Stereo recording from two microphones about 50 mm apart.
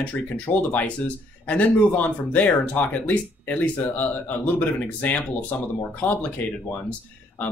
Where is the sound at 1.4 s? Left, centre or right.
Left.